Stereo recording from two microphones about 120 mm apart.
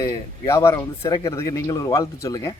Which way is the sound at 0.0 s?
25° left (ahead or behind).